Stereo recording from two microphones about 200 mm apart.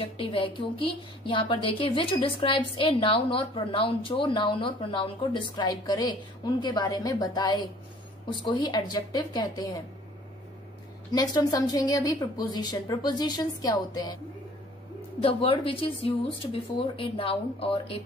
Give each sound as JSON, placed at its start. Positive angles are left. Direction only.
{"t": 0.0, "sound": "a woman's voice", "side_deg": 25}
{"t": 11.1, "sound": "a woman's voice", "side_deg": 20}